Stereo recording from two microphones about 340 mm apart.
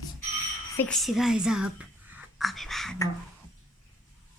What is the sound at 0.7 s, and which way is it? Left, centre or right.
Whispering, centre.